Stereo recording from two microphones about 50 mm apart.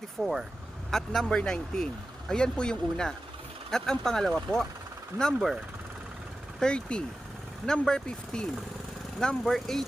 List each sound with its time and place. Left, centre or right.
0.2 s speech: centre
0.9 s a man's voice: centre
5.1 s speech: right
6.6 s a man's voice: centre